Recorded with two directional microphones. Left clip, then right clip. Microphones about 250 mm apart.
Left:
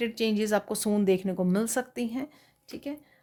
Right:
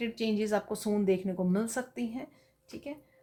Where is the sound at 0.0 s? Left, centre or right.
Left.